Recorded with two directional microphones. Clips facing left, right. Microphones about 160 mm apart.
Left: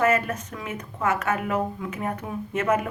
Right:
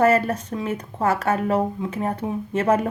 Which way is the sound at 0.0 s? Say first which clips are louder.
Right 4 dB; 35° right (ahead or behind).